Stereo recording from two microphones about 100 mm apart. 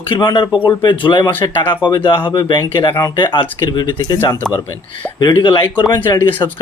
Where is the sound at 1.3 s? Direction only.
20° left (ahead or behind).